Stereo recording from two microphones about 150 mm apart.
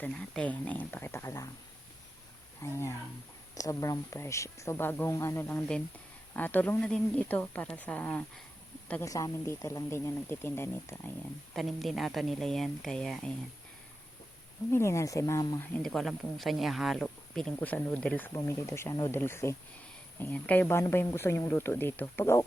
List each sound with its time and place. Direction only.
0.0 s speech: 10° left (ahead or behind)
2.6 s speech: 20° left (ahead or behind)
11.5 s speech: centre (ahead or behind)
14.7 s speech: 20° left (ahead or behind)
15.7 s speech: 5° left (ahead or behind)